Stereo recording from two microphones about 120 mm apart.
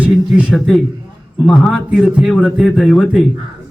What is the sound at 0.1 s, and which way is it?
A man's voice, 5° right (ahead or behind).